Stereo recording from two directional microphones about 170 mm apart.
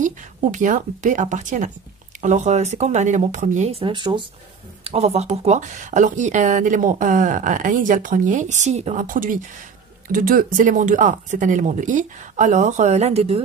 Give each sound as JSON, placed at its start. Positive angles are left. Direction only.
{"t": 0.0, "sound": "a woman's voice", "side_deg": -50}